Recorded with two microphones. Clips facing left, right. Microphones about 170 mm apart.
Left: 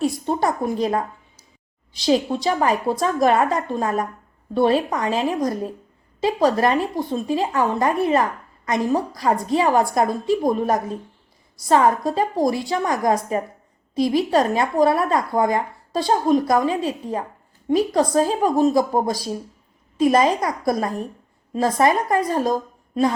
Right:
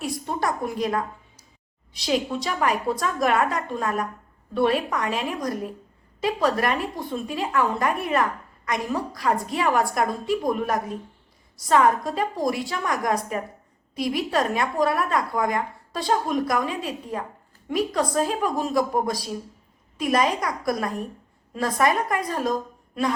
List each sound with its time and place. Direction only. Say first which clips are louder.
0.0 s a woman's voice: left 6 dB; 25° left (ahead or behind)
2.0 s a woman's voice: left 6 dB; 30° left (ahead or behind)